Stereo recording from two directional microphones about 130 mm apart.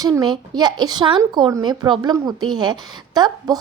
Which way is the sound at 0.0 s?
30° right (ahead or behind).